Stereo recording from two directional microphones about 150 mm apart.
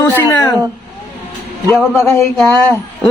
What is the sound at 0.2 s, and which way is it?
Speech, 20° left (ahead or behind).